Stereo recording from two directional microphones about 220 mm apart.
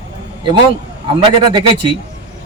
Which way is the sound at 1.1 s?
20° right (ahead or behind).